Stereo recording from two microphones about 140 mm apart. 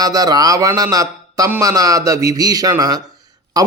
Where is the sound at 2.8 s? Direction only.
25° right (ahead or behind).